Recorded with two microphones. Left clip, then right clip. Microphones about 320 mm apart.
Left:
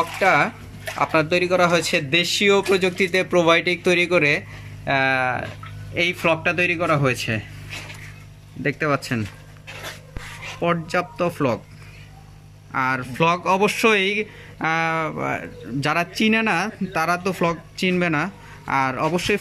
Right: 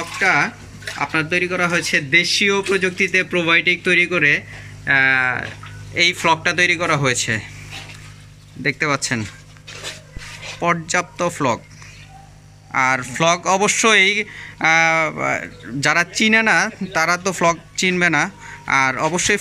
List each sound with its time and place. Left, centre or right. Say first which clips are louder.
0.2 s speech: right 2 dB; centre
8.6 s speech: right 3 dB; centre
10.6 s speech: right 3 dB; centre
12.7 s speech: right 4 dB; centre